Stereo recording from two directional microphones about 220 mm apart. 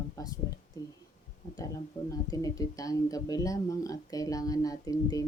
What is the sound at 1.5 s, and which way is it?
Speech, 15° left (ahead or behind).